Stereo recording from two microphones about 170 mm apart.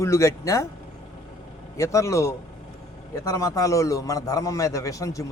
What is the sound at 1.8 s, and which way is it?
A man's voice, 15° left (ahead or behind).